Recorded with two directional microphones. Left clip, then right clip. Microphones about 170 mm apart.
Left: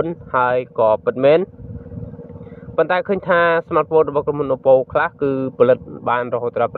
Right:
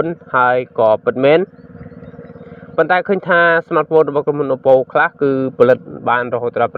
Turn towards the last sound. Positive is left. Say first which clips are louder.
# right 3 dB
turn(degrees=-20)  # may be behind; listen again after turning